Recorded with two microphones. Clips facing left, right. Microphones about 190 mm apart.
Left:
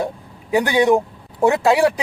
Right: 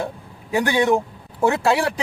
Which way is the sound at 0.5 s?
15° left (ahead or behind).